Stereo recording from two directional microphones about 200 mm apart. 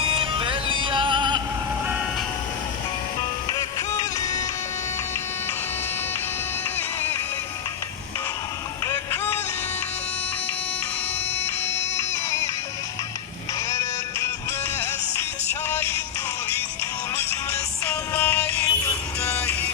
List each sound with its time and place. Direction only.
0.0 s music: 25° right (ahead or behind)
3.5 s music: 15° left (ahead or behind)
8.8 s music: 10° left (ahead or behind)
11.3 s music: 10° left (ahead or behind)
13.7 s music: 15° left (ahead or behind)
15.7 s music: 10° left (ahead or behind)
17.2 s music: 10° left (ahead or behind)